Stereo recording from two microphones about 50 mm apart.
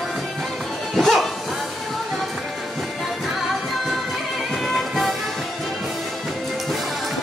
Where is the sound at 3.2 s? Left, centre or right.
Centre.